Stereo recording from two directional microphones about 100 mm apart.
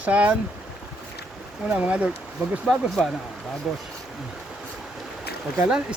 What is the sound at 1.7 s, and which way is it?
Speech, 15° right (ahead or behind).